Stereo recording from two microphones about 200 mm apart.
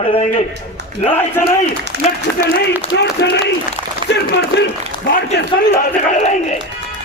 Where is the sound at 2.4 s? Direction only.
55° left (ahead or behind).